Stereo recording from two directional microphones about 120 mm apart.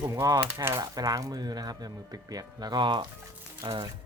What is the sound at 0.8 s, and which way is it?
Speech, 35° right (ahead or behind).